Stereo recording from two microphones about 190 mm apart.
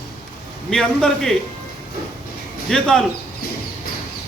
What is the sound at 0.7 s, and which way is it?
Speech, 5° left (ahead or behind).